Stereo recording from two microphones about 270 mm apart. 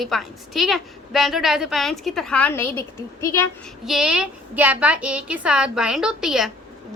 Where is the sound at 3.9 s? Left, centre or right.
Centre.